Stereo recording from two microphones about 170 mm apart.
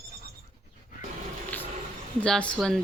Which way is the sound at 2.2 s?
5° left (ahead or behind).